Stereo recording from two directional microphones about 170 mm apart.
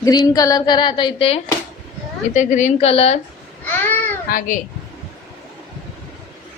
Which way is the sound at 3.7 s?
10° left (ahead or behind).